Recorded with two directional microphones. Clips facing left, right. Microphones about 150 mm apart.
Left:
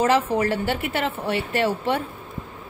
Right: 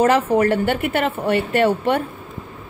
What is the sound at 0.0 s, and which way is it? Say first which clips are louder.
A woman's voice: right 4 dB; 55° right (ahead or behind).